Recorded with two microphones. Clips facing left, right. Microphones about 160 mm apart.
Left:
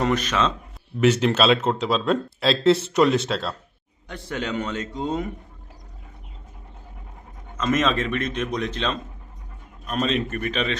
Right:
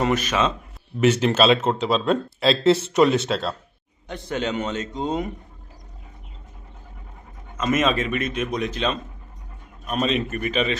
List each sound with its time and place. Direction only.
0.0 s a man's voice: 10° right (ahead or behind)
4.1 s a man's voice: 20° right (ahead or behind)
7.5 s a man's voice: 10° right (ahead or behind)